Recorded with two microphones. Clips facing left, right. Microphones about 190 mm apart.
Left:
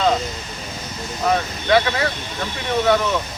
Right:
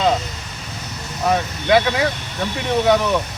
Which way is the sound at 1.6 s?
15° right (ahead or behind).